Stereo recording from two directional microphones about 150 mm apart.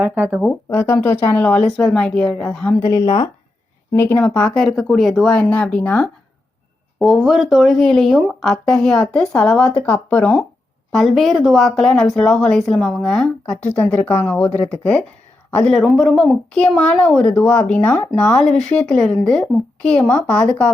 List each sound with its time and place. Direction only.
0.0 s speech: 15° right (ahead or behind)
0.7 s speech: 15° left (ahead or behind)
2.8 s speech: 25° left (ahead or behind)
7.0 s a woman's voice: centre (ahead or behind)